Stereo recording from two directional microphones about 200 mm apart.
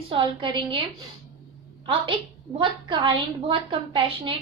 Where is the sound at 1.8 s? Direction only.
25° right (ahead or behind).